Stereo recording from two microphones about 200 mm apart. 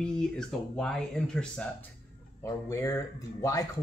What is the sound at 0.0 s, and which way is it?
Speech, 5° left (ahead or behind).